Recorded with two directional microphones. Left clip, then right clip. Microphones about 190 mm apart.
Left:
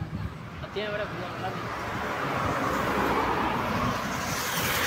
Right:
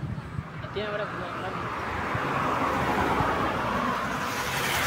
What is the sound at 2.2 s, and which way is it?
Vehicle, 50° right (ahead or behind).